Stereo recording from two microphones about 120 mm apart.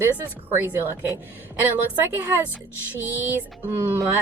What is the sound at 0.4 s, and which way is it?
A woman's voice, 15° right (ahead or behind).